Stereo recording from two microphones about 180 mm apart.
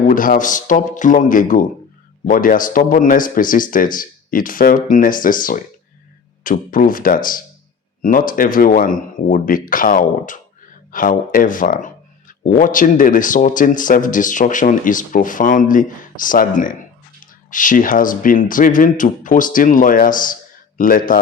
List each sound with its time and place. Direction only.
0.0 s speech: 50° left (ahead or behind)